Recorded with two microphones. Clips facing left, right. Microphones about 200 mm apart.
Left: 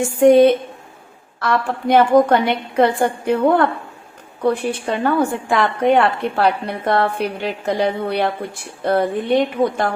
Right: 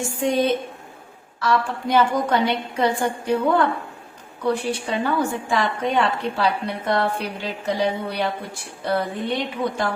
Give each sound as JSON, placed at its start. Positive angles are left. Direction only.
{"t": 0.2, "sound": "a woman's voice", "side_deg": 55}
{"t": 4.7, "sound": "a woman's voice", "side_deg": 55}